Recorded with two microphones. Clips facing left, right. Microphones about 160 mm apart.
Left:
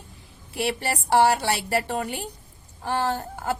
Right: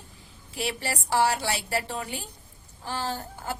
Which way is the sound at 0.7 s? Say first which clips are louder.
Left 5 dB; 60° left (ahead or behind).